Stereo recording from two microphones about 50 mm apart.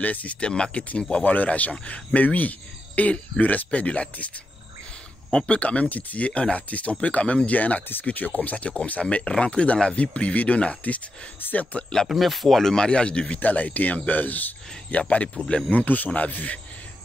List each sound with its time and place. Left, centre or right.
0.0 s speech: left
5.3 s speech: left
12.2 s speech: centre
13.4 s speech: left
15.7 s speech: left